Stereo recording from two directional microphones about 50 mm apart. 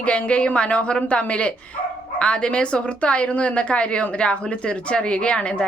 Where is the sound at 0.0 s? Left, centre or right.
Left.